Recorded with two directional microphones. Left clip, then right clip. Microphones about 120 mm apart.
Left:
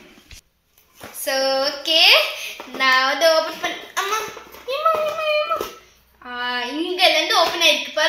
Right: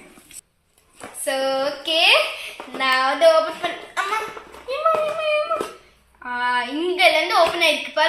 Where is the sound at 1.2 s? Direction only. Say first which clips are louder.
Left 2 dB; 15° left (ahead or behind).